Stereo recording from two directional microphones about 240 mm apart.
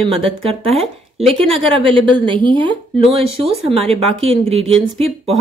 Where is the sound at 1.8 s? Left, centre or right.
Right.